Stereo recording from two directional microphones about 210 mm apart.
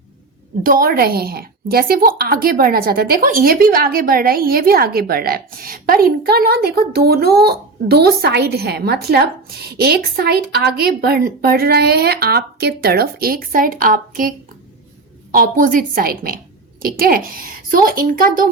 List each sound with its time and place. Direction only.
0.6 s a woman's voice: 45° right (ahead or behind)